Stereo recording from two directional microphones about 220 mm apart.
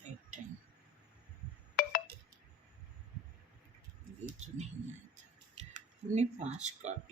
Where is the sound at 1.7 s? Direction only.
40° left (ahead or behind).